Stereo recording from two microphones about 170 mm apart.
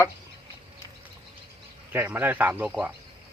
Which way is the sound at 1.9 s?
10° right (ahead or behind).